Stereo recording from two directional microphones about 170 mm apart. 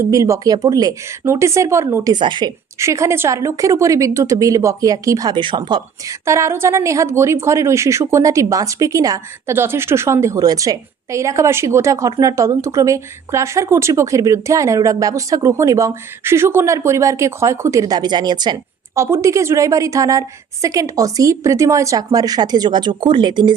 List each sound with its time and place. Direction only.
0.0 s speech: 20° right (ahead or behind)
2.1 s a woman's voice: 25° right (ahead or behind)
2.7 s a woman's voice: 15° right (ahead or behind)